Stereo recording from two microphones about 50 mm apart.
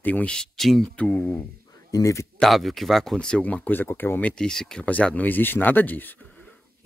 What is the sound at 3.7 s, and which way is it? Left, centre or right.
Speech, left.